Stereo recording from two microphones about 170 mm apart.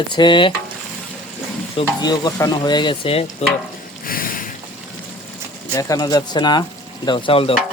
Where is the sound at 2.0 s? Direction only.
25° left (ahead or behind).